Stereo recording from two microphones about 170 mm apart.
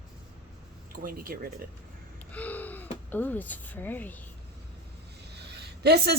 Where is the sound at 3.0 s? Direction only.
10° left (ahead or behind).